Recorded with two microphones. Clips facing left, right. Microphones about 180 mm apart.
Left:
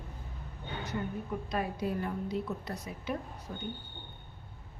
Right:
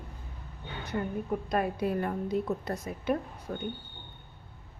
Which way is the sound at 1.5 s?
55° right (ahead or behind).